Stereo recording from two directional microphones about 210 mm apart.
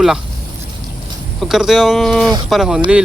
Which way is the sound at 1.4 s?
Centre (ahead or behind).